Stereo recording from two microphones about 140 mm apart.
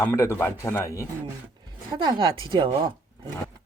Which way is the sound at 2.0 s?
30° right (ahead or behind).